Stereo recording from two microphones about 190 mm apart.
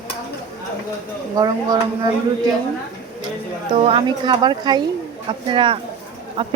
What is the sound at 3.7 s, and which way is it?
Speech, 30° right (ahead or behind).